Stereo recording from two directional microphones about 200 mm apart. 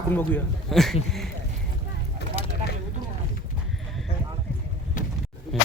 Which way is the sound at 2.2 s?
55° left (ahead or behind).